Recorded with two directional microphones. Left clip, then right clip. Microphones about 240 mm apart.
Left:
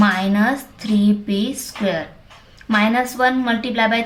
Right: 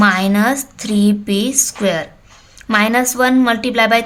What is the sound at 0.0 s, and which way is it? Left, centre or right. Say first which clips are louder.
A woman's voice: right 4 dB; right.